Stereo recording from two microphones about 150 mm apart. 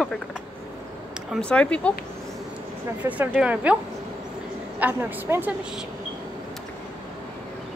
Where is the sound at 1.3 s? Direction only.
5° left (ahead or behind).